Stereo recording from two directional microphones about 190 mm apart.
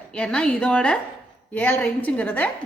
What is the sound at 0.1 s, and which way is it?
A woman's voice, 5° left (ahead or behind).